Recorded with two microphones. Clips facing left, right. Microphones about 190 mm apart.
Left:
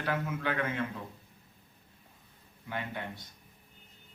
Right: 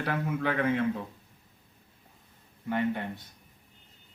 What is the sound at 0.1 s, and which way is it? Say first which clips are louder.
Speech: right 2 dB; 50° right (ahead or behind).